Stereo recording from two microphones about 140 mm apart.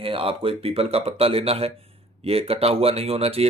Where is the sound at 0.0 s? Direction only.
40° right (ahead or behind).